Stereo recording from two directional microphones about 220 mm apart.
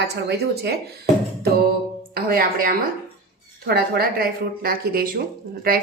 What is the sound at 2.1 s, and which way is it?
Speech, 40° right (ahead or behind).